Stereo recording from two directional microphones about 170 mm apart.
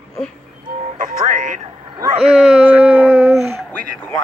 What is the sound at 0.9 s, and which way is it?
Speech, 50° right (ahead or behind).